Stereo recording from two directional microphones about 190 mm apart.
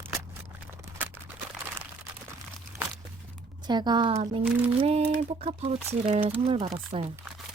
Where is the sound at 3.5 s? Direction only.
25° right (ahead or behind).